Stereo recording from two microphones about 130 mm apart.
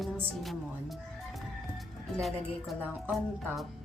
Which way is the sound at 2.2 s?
Centre (ahead or behind).